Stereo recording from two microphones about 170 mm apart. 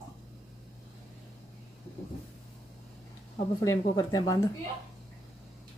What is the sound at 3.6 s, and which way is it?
Speech, 20° left (ahead or behind).